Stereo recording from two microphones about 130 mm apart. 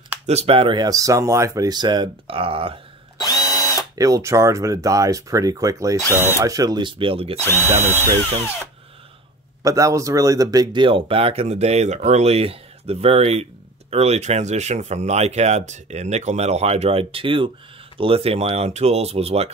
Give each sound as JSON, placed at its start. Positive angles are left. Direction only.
{"t": 0.3, "sound": "speech", "side_deg": -50}
{"t": 0.8, "sound": "speech", "side_deg": -25}
{"t": 3.2, "sound": "drill", "side_deg": 30}
{"t": 3.9, "sound": "speech", "side_deg": -25}
{"t": 7.4, "sound": "speech", "side_deg": 20}
{"t": 9.6, "sound": "speech", "side_deg": -25}